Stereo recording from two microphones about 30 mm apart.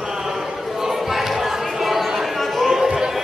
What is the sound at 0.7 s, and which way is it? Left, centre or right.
Basketball bounce, centre.